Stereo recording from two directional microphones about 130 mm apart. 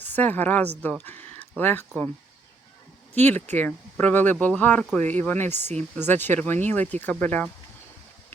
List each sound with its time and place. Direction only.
0.0 s speech: 15° left (ahead or behind)
3.2 s speech: 15° left (ahead or behind)